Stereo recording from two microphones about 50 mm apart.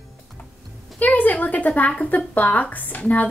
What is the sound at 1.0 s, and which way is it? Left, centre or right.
Speech, left.